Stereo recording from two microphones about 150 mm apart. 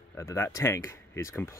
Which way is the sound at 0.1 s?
15° left (ahead or behind).